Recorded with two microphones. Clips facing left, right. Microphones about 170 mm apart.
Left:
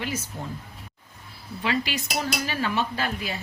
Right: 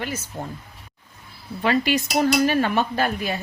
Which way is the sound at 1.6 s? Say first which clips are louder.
Right 7 dB; 50° right (ahead or behind).